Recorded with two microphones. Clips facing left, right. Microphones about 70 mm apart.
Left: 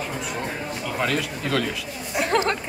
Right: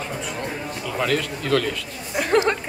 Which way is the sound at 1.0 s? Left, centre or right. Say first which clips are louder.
Right 2 dB; centre.